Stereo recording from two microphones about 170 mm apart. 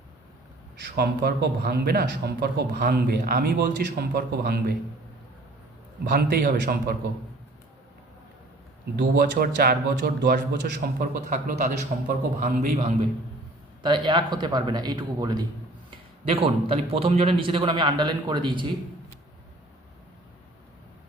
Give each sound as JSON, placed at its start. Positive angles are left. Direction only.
{"t": 0.8, "sound": "a man's voice", "side_deg": -75}
{"t": 6.1, "sound": "a man's voice", "side_deg": -70}
{"t": 9.3, "sound": "a man's voice", "side_deg": -70}
{"t": 13.8, "sound": "speech", "side_deg": -30}
{"t": 16.2, "sound": "a man's voice", "side_deg": -35}